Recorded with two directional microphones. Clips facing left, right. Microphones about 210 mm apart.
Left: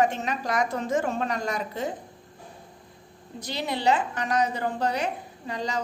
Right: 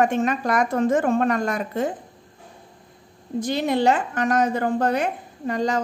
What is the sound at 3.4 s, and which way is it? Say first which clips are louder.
A woman's voice: right 9 dB; 50° right (ahead or behind).